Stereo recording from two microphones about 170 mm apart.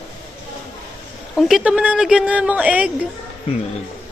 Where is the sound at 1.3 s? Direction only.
Centre (ahead or behind).